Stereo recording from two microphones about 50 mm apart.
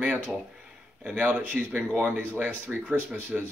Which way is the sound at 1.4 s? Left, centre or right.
Right.